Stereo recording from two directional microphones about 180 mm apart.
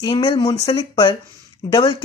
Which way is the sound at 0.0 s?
25° left (ahead or behind).